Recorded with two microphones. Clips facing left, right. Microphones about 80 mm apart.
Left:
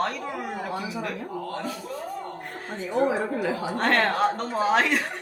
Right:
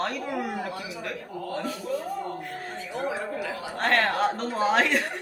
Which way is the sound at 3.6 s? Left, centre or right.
Centre.